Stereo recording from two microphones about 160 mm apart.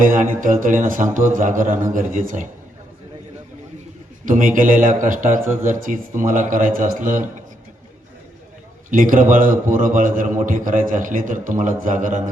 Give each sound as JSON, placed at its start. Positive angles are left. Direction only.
{"t": 0.1, "sound": "a man's voice", "side_deg": -55}
{"t": 4.3, "sound": "a man's voice", "side_deg": -55}
{"t": 8.9, "sound": "a man's voice", "side_deg": -60}